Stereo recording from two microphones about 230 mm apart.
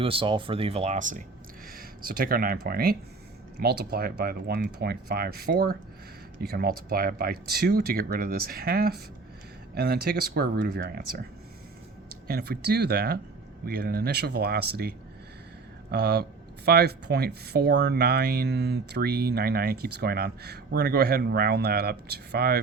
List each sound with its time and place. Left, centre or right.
0.0 s speech: right
12.3 s speech: right